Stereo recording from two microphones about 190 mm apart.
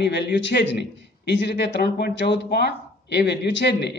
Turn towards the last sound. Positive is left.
turn(degrees=65)  # may be behind; listen again after turning